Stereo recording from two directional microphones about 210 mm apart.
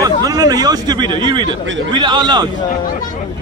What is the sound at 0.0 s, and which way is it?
A man's voice, 15° right (ahead or behind).